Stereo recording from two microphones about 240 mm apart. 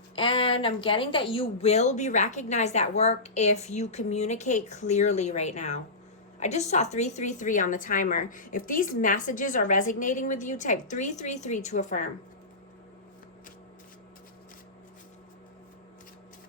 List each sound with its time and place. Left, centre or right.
0.2 s a woman's voice: left